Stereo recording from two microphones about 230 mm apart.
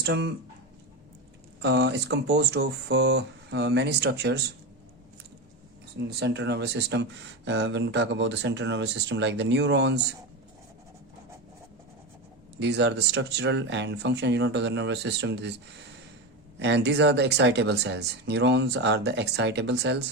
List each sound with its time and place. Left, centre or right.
0.0 s speech: right
1.6 s speech: right
6.0 s speech: right
12.5 s speech: right
16.6 s speech: right